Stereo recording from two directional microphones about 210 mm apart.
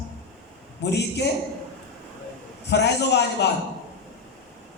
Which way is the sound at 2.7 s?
55° left (ahead or behind).